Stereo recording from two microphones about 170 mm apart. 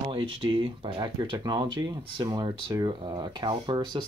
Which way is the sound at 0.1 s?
30° right (ahead or behind).